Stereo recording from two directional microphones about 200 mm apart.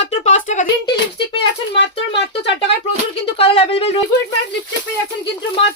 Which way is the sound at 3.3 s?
30° left (ahead or behind).